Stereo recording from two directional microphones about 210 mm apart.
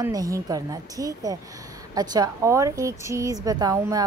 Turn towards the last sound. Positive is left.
turn(degrees=-15)  # may be behind; listen again after turning